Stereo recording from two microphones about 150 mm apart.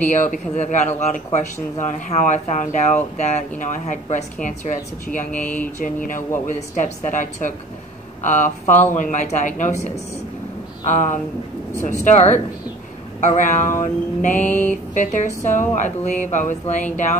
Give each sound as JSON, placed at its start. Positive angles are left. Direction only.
{"t": 0.0, "sound": "speech", "side_deg": 55}
{"t": 5.4, "sound": "mantra", "side_deg": 10}
{"t": 5.8, "sound": "speech", "side_deg": 60}
{"t": 13.4, "sound": "speech", "side_deg": 55}